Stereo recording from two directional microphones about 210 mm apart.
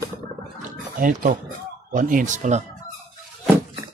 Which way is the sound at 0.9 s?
40° right (ahead or behind).